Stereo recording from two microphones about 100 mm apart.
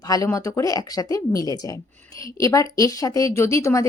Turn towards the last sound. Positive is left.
turn(degrees=30)  # may be behind; listen again after turning